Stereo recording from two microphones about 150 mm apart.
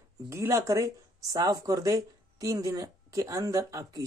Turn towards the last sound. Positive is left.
turn(degrees=-20)  # may be behind; listen again after turning